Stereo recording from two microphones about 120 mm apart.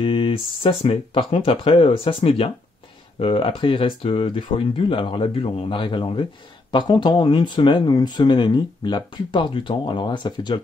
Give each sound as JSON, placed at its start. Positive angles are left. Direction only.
{"t": 0.0, "sound": "speech", "side_deg": 45}